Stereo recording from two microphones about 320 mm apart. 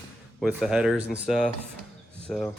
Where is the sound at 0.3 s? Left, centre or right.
Centre.